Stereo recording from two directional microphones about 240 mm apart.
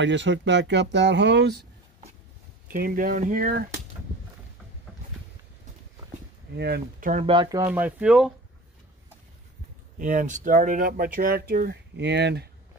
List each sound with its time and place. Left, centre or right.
0.0 s speech: right
2.7 s speech: right
6.5 s speech: right
7.2 s speech: centre
9.9 s speech: right